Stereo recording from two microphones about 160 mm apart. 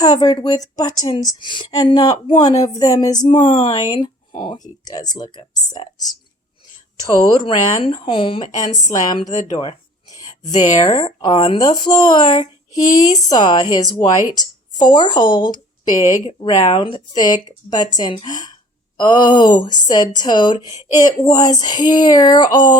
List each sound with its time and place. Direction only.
0.0 s a woman's voice: 25° left (ahead or behind)
7.3 s a woman's voice: 30° left (ahead or behind)